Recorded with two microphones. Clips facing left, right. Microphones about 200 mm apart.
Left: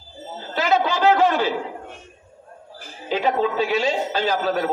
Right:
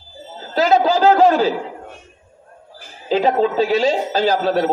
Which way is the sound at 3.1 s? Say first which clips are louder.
Right 5 dB; 35° right (ahead or behind).